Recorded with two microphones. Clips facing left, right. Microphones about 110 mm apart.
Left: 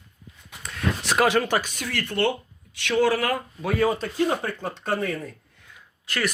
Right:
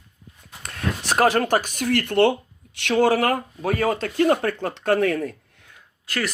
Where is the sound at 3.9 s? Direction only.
80° right.